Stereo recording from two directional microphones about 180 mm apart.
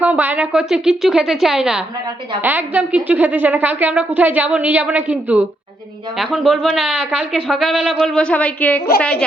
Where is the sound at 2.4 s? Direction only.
10° right (ahead or behind).